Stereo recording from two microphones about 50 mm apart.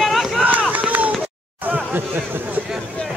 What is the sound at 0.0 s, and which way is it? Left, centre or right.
Run, centre.